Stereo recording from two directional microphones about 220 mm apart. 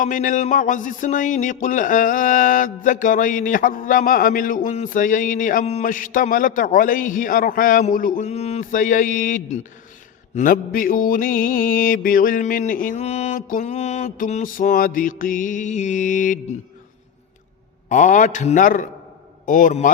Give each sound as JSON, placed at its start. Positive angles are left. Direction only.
{"t": 0.0, "sound": "a man's voice", "side_deg": 35}
{"t": 17.8, "sound": "a man's voice", "side_deg": 35}